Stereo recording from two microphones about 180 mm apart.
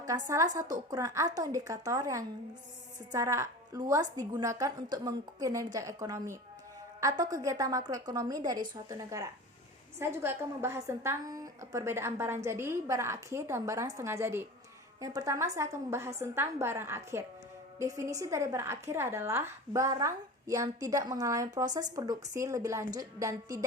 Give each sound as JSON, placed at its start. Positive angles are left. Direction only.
{"t": 0.0, "sound": "a woman's voice", "side_deg": -20}